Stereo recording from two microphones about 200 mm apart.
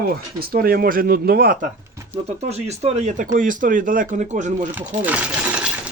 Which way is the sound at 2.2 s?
35° right (ahead or behind).